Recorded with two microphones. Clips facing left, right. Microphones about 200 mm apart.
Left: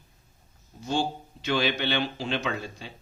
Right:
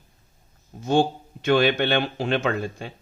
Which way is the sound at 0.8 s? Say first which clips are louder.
Right 7 dB; 55° right (ahead or behind).